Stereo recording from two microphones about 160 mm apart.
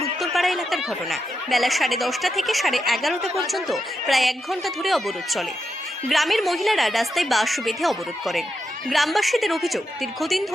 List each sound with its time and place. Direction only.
0.3 s speech: centre (ahead or behind)